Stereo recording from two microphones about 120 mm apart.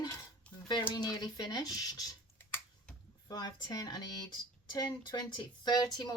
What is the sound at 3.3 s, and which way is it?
Speech, 35° left (ahead or behind).